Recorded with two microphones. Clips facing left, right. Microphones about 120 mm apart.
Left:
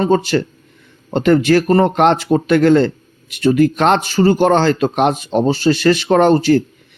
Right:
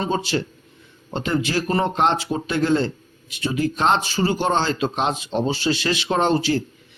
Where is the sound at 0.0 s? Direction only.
55° left (ahead or behind).